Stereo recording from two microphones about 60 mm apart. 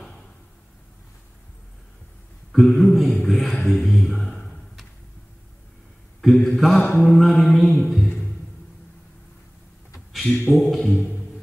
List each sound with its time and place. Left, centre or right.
2.5 s a man's voice: centre
3.3 s mantra: centre
3.8 s speech: centre
6.2 s mantra: centre
6.8 s a sound: left
7.2 s mantra: centre
9.9 s a sound: centre
10.3 s a sound: left
10.6 s mantra: centre
10.9 s music: left